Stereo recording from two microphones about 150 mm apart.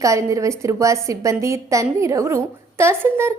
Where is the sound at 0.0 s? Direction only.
20° right (ahead or behind).